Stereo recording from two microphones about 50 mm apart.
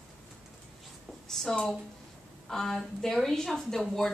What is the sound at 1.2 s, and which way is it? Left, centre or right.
A woman's voice, centre.